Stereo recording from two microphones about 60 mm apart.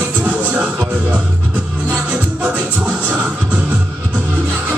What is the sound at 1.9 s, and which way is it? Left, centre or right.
Music, right.